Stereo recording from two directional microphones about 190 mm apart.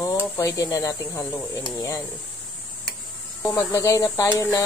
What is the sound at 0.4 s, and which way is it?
Speech, 15° left (ahead or behind).